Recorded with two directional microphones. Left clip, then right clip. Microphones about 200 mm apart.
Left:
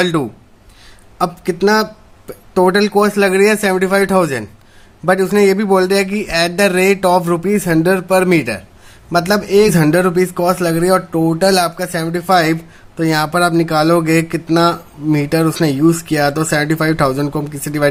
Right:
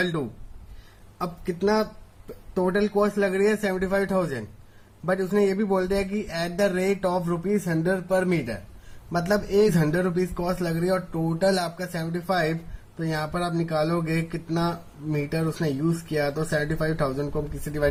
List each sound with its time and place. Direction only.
0.0 s speech: 45° left (ahead or behind)